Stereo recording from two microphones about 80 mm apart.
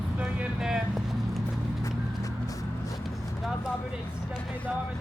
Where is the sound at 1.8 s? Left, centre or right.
Left.